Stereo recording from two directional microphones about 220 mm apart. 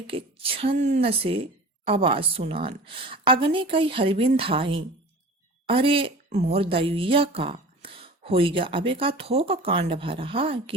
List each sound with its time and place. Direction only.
0.1 s a woman's voice: 25° right (ahead or behind)